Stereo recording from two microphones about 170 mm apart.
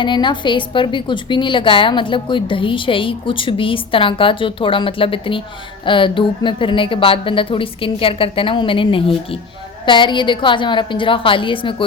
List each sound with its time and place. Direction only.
0.0 s a woman's voice: 30° left (ahead or behind)